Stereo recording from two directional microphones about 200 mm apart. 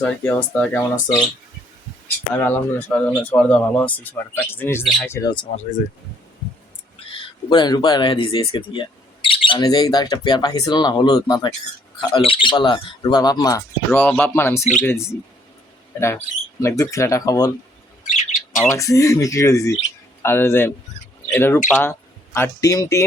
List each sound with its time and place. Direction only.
0.0 s speech: 5° left (ahead or behind)
2.4 s speech: 10° left (ahead or behind)
7.1 s speech: 20° left (ahead or behind)
13.9 s speech: 5° left (ahead or behind)
14.6 s speech: 35° left (ahead or behind)
16.0 s speech: 15° left (ahead or behind)
18.0 s bird: 35° left (ahead or behind)
18.7 s speech: 15° left (ahead or behind)